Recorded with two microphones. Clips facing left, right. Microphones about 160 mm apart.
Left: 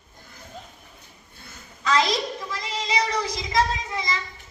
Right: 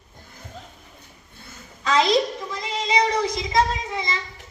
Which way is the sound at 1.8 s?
25° right (ahead or behind).